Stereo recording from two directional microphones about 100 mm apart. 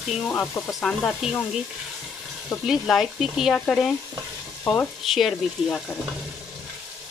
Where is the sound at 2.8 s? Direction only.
Centre (ahead or behind).